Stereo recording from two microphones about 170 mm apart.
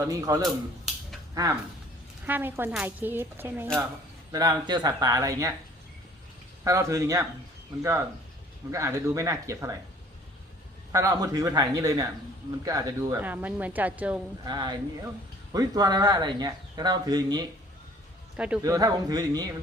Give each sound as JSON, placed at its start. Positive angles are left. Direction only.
{"t": 0.0, "sound": "speech", "side_deg": -20}
{"t": 6.7, "sound": "speech", "side_deg": -20}
{"t": 10.9, "sound": "speech", "side_deg": -20}
{"t": 14.4, "sound": "speech", "side_deg": -25}
{"t": 18.3, "sound": "speech", "side_deg": -5}
{"t": 18.6, "sound": "speech", "side_deg": -20}